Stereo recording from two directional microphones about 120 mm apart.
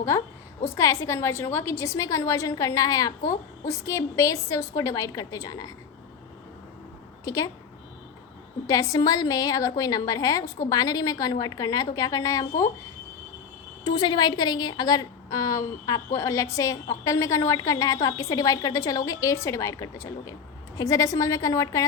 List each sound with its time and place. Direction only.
0.6 s a woman's voice: 25° left (ahead or behind)
7.3 s a woman's voice: 25° left (ahead or behind)
8.6 s a woman's voice: 30° left (ahead or behind)
13.8 s a woman's voice: 35° left (ahead or behind)